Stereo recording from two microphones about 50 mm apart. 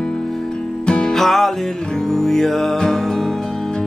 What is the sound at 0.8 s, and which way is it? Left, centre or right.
Music, centre.